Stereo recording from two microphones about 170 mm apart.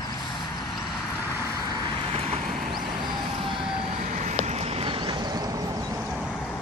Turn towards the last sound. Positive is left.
turn(degrees=-25)  # may be behind; listen again after turning